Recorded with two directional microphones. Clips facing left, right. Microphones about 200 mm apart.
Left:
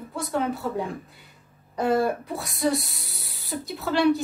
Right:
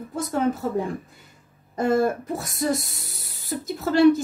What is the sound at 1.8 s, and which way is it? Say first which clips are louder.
Speech: right 2 dB; 45° right (ahead or behind).